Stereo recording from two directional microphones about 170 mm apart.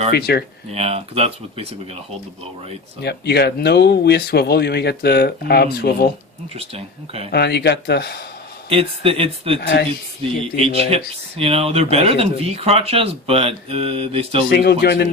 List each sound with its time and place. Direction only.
0.1 s speech: 70° left (ahead or behind)
0.7 s speech: 35° right (ahead or behind)
3.0 s speech: 75° left (ahead or behind)
6.6 s speech: 35° right (ahead or behind)
7.3 s speech: 75° left (ahead or behind)
8.7 s speech: 35° right (ahead or behind)
9.6 s speech: 75° left (ahead or behind)
10.4 s speech: 35° right (ahead or behind)
14.5 s speech: 70° left (ahead or behind)